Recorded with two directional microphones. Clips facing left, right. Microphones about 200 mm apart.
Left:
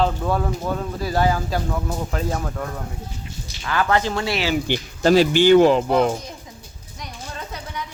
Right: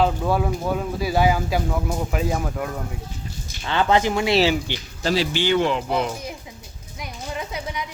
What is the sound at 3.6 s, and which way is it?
Speech, 25° right (ahead or behind).